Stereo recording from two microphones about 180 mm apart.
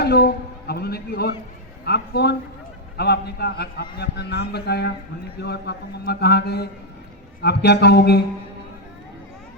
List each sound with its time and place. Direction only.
0.0 s a man's voice: 65° left (ahead or behind)